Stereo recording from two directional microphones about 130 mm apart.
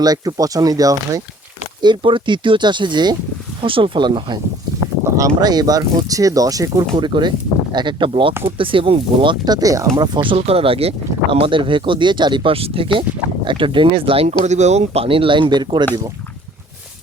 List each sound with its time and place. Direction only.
0.0 s speech: 30° right (ahead or behind)
1.8 s speech: 40° right (ahead or behind)
5.0 s speech: 25° right (ahead or behind)
9.9 s speech: 40° right (ahead or behind)
14.4 s speech: 60° right (ahead or behind); by 15.9 s 35° right (ahead or behind)